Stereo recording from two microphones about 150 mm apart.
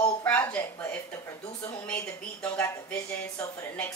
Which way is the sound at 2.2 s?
10° left (ahead or behind).